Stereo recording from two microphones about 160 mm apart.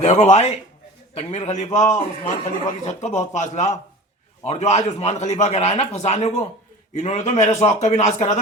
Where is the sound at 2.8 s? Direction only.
45° left (ahead or behind).